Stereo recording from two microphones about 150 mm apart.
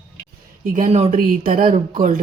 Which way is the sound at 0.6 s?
65° right (ahead or behind).